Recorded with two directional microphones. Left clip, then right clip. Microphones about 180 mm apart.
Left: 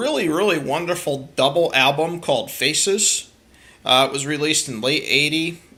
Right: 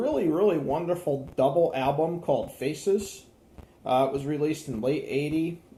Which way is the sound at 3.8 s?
15° left (ahead or behind).